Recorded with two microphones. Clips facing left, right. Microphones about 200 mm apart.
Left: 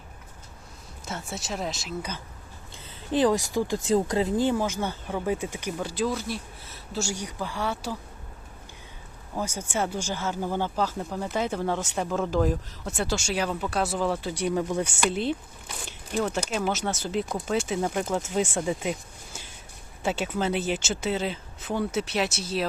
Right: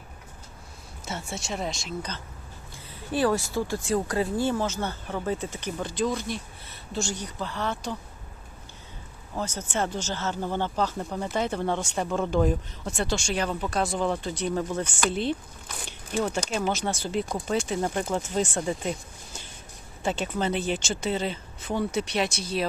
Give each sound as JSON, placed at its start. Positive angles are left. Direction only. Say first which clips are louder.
{"t": 1.0, "sound": "speech", "louder": "even", "side_deg": 0}
{"t": 2.7, "sound": "speech", "louder": "left 3 dB", "side_deg": 20}
{"t": 9.3, "sound": "speech", "louder": "even", "side_deg": 10}